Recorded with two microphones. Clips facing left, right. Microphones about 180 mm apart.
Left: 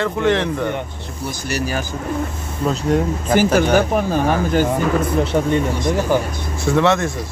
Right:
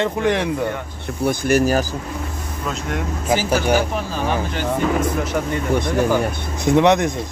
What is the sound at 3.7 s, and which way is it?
Speech, 50° left (ahead or behind).